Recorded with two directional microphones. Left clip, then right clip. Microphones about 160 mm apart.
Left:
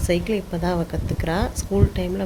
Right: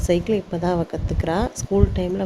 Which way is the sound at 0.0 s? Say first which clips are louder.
Right 2 dB; 35° right (ahead or behind).